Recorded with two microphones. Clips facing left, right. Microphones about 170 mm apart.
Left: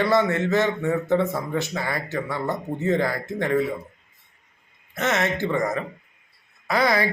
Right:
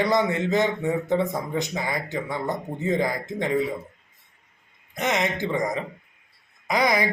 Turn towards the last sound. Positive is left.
turn(degrees=-15)  # may be behind; listen again after turning